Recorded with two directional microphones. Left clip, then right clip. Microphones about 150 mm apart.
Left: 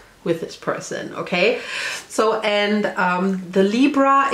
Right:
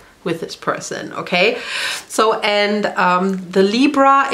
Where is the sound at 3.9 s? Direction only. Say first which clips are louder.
Right 4 dB; 30° right (ahead or behind).